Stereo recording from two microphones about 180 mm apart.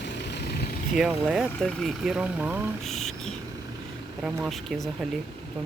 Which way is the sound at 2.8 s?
Centre (ahead or behind).